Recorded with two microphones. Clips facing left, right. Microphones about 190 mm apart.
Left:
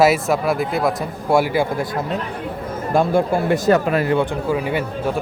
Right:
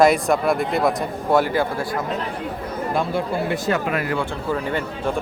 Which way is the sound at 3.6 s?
35° left (ahead or behind).